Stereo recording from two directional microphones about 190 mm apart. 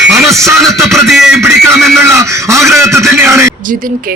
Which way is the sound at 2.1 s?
15° right (ahead or behind).